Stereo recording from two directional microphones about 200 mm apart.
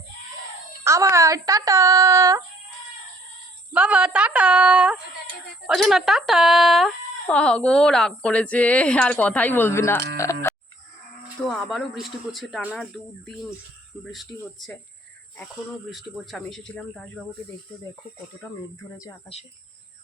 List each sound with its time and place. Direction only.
0.9 s speech: 15° right (ahead or behind)
3.7 s speech: 5° right (ahead or behind); by 10.3 s 15° left (ahead or behind)
11.4 s speech: centre (ahead or behind)
15.9 s speech: centre (ahead or behind)